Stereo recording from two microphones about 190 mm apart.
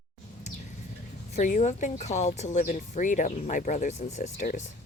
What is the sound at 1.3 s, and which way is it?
Speech, 40° left (ahead or behind).